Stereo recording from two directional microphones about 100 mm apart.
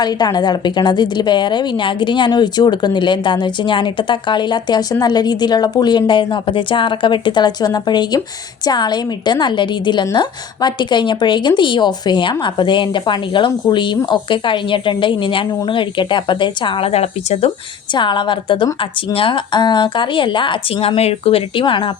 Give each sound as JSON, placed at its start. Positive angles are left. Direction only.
{"t": 0.0, "sound": "a woman's voice", "side_deg": 45}
{"t": 17.9, "sound": "a woman's voice", "side_deg": 50}